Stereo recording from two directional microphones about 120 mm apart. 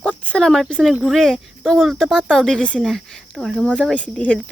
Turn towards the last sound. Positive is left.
turn(degrees=10)  # may be behind; listen again after turning